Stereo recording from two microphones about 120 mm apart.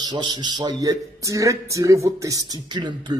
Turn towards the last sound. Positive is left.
turn(degrees=-40)  # may be behind; listen again after turning